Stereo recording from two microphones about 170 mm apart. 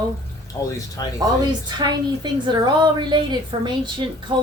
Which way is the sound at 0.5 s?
25° left (ahead or behind).